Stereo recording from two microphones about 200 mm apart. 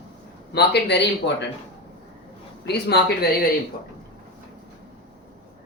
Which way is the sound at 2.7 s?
55° left (ahead or behind).